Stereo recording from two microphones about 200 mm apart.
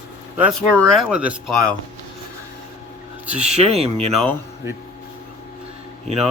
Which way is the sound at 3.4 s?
30° right (ahead or behind).